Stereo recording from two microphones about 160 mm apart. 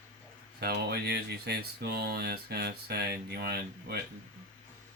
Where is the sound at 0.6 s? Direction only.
80° right.